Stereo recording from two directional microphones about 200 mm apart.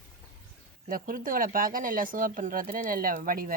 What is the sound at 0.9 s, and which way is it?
Speech, 45° right (ahead or behind).